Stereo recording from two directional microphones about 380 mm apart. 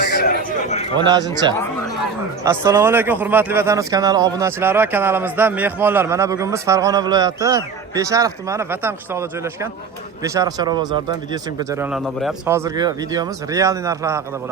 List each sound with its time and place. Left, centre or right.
0.1 s chatter: left
0.9 s speech: centre